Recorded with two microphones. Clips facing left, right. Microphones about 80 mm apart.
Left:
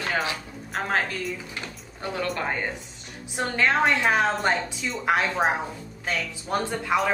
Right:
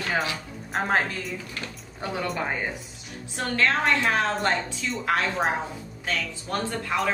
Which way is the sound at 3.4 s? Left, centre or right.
Centre.